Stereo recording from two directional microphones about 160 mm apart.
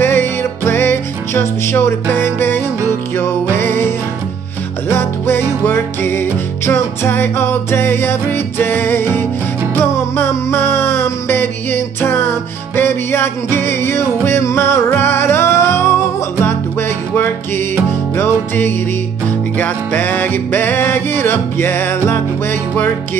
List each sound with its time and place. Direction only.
0.0 s music: 15° left (ahead or behind)